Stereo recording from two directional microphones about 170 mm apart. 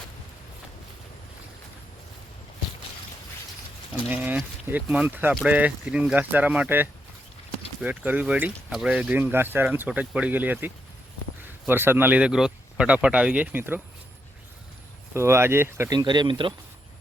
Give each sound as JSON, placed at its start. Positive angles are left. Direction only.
{"t": 4.1, "sound": "speech", "side_deg": -10}
{"t": 15.1, "sound": "speech", "side_deg": -15}